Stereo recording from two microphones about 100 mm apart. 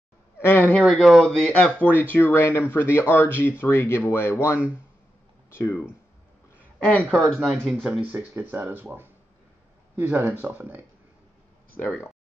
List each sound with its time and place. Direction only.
0.4 s speech: 20° left (ahead or behind)
0.8 s speech: 5° left (ahead or behind); by 5.8 s 25° left (ahead or behind)
6.8 s speech: 15° left (ahead or behind)
8.0 s speech: 15° right (ahead or behind)